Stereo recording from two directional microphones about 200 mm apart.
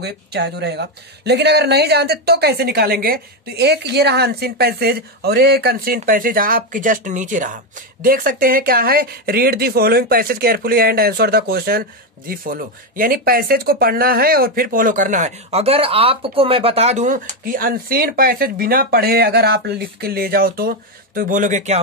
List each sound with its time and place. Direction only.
0.0 s speech: 55° right (ahead or behind); by 21.7 s 35° right (ahead or behind)